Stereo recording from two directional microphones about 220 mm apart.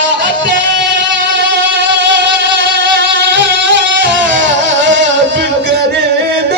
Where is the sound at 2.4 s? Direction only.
55° right (ahead or behind).